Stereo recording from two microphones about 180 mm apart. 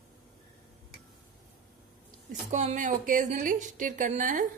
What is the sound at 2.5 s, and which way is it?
A woman's voice, 40° right (ahead or behind).